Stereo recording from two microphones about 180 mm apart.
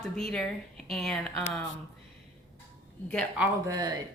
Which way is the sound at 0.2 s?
5° left (ahead or behind).